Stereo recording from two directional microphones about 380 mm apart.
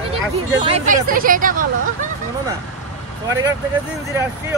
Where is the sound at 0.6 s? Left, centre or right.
Centre.